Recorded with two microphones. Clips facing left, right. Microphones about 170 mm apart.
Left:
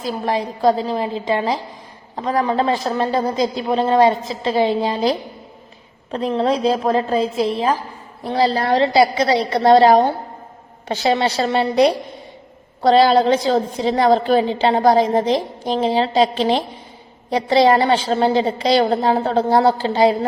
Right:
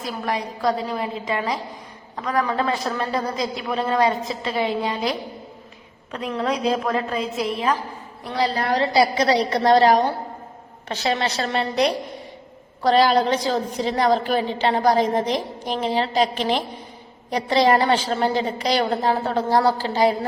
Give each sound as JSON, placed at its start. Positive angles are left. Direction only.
{"t": 0.0, "sound": "a woman's voice", "side_deg": 30}
{"t": 12.8, "sound": "a woman's voice", "side_deg": 30}